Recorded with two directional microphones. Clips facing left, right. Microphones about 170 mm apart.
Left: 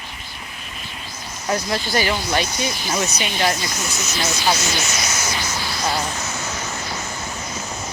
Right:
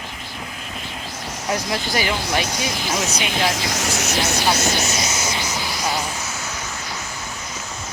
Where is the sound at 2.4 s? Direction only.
90° right; by 4.8 s 50° right (ahead or behind).